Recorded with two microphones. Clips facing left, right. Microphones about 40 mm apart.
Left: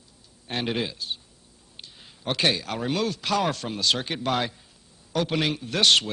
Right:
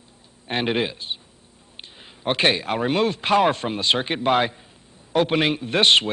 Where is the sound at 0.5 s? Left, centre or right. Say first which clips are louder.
Right 5 dB; right.